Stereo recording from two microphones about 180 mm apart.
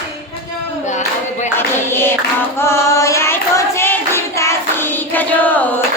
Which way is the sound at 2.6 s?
15° left (ahead or behind).